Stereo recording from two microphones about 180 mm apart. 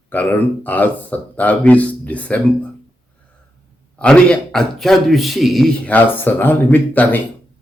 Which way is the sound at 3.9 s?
5° left (ahead or behind).